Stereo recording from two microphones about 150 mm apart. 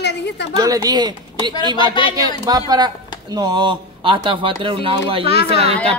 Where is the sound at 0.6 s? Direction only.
25° right (ahead or behind).